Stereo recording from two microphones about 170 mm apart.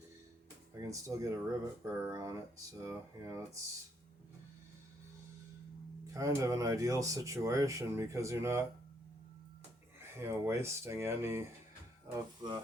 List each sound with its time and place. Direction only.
0.7 s speech: 20° right (ahead or behind)
6.1 s speech: 20° right (ahead or behind)
10.2 s speech: 15° right (ahead or behind)